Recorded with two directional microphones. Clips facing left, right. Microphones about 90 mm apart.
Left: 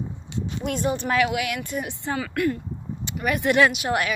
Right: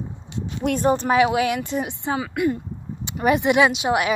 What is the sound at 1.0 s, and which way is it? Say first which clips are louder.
A woman's voice: right 5 dB; 20° right (ahead or behind).